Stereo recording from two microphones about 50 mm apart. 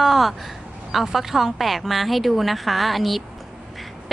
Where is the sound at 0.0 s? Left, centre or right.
Centre.